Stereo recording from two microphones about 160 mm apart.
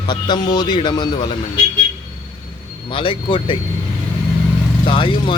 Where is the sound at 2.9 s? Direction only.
35° left (ahead or behind).